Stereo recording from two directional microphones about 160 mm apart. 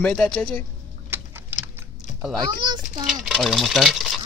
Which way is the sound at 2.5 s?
25° right (ahead or behind).